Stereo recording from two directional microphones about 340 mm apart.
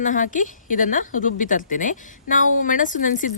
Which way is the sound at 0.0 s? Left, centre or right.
Left.